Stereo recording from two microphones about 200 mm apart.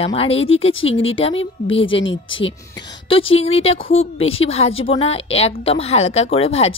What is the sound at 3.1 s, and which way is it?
Speech, 30° left (ahead or behind).